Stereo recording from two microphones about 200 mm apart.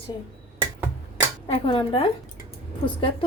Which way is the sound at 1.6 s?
25° left (ahead or behind).